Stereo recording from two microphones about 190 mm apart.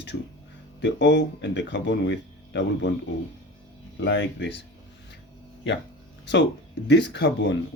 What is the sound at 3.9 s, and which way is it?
Speech, 70° left (ahead or behind).